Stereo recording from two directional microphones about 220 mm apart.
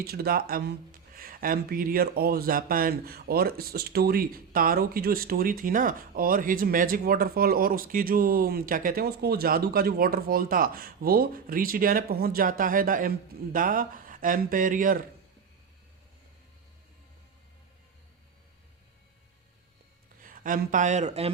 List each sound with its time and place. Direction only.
0.0 s speech: 45° right (ahead or behind)
20.2 s speech: 40° right (ahead or behind)